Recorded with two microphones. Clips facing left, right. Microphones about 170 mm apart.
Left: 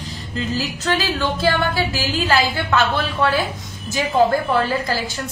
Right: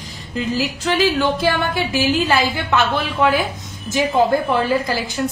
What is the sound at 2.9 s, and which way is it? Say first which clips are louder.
A woman's voice: right 2 dB; 15° right (ahead or behind).